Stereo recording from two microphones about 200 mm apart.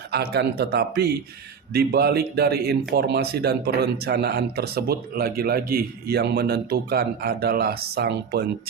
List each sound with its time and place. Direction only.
0.1 s speech: 55° right (ahead or behind)